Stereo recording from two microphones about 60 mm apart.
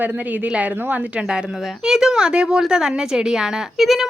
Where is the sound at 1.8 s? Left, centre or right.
Centre.